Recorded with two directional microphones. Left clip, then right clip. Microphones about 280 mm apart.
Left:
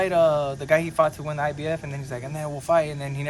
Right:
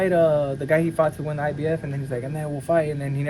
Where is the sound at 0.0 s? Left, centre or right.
Centre.